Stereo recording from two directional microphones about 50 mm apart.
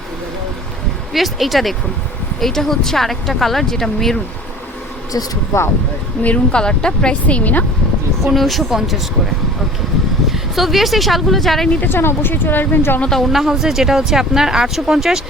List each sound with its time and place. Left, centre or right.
1.1 s speech: centre
5.5 s speech: left
6.2 s speech: left
8.3 s speech: centre
11.7 s speech: left
13.1 s a woman's voice: centre
13.3 s speech: centre